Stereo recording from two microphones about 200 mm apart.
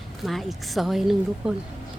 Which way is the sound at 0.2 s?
Centre (ahead or behind).